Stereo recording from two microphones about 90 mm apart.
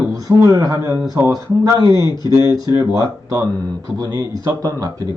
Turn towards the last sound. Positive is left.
turn(degrees=-40)  # may be behind; listen again after turning